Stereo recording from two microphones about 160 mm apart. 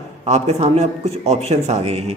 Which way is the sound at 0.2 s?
40° right (ahead or behind).